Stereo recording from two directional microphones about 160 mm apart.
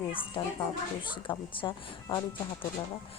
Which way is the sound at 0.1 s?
35° left (ahead or behind).